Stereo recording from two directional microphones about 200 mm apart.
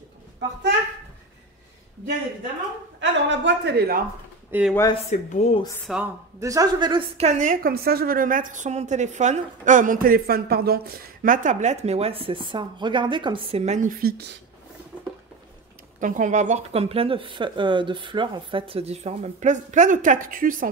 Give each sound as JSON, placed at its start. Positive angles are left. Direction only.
{"t": 3.0, "sound": "speech", "side_deg": -65}
{"t": 4.5, "sound": "speech", "side_deg": -5}
{"t": 5.1, "sound": "a woman's voice", "side_deg": 35}
{"t": 5.9, "sound": "a woman's voice", "side_deg": 0}
{"t": 6.4, "sound": "a woman's voice", "side_deg": -15}
{"t": 13.8, "sound": "speech", "side_deg": -50}
{"t": 16.0, "sound": "a woman's voice", "side_deg": -40}